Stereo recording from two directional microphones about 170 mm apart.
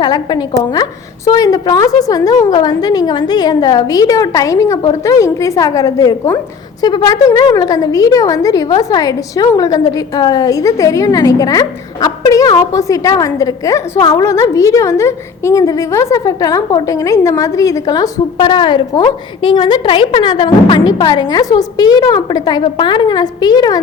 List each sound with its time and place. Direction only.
0.0 s a woman's voice: 25° left (ahead or behind)